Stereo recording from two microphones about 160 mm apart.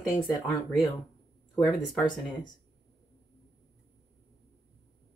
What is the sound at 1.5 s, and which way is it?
Speech, 5° left (ahead or behind).